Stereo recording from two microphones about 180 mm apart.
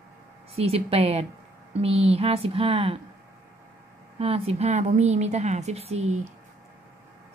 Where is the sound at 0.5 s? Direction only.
35° right (ahead or behind).